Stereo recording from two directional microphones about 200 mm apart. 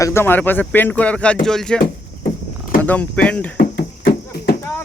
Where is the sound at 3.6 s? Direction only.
50° left (ahead or behind).